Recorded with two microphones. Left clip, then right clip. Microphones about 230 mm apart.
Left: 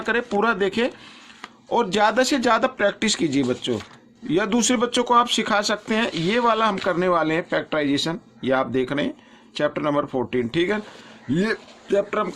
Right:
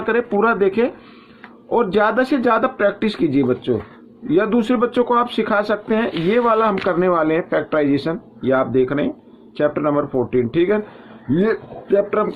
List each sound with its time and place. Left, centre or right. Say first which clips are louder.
0.0 s speech: right 4 dB; left